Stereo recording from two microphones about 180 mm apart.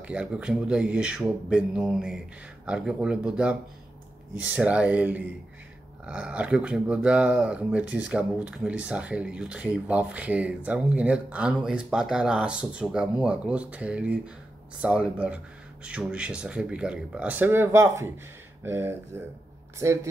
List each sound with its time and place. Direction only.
0.0 s speech: 5° right (ahead or behind)